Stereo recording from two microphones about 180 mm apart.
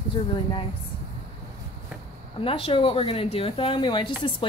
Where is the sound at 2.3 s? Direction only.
30° left (ahead or behind).